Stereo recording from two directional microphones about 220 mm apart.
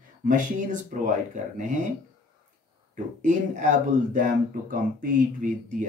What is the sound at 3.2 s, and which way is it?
Speech, 35° right (ahead or behind).